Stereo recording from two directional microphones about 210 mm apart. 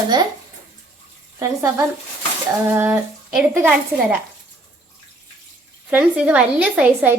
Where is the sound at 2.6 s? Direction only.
10° right (ahead or behind).